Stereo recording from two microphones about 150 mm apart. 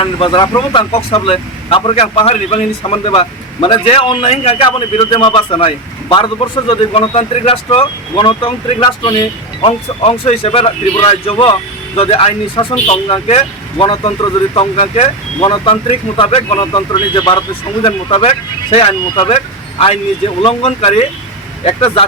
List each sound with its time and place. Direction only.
0.0 s speech: 35° left (ahead or behind)